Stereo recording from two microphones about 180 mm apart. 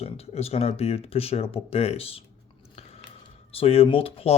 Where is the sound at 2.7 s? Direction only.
35° left (ahead or behind).